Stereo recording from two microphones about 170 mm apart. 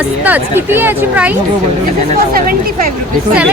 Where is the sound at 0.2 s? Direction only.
10° right (ahead or behind).